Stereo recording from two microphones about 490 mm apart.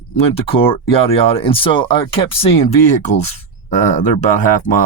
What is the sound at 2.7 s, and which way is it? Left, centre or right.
Speech, left.